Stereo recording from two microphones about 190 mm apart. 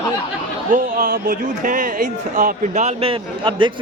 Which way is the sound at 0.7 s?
50° right (ahead or behind).